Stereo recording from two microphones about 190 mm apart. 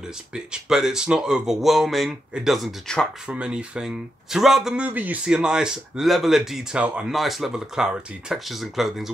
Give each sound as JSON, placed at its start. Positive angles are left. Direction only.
{"t": 0.3, "sound": "speech", "side_deg": -5}